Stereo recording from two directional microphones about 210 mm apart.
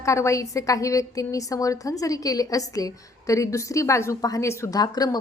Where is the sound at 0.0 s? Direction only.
15° left (ahead or behind).